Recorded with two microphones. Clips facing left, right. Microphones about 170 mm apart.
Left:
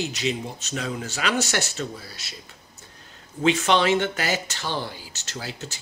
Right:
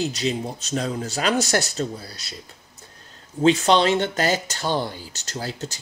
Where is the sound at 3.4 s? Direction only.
35° right (ahead or behind).